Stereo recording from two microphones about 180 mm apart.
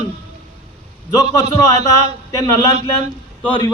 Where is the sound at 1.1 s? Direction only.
20° left (ahead or behind).